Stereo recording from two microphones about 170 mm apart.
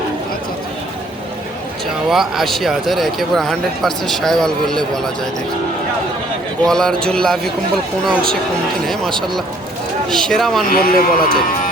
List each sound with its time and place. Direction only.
2.0 s speech: centre (ahead or behind)
6.7 s speech: 5° left (ahead or behind)
10.1 s speech: centre (ahead or behind)
10.7 s speech: 55° left (ahead or behind)